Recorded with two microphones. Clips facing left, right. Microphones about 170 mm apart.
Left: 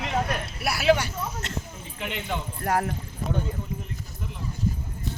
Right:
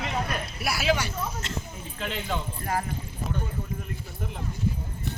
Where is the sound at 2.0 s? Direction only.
15° left (ahead or behind).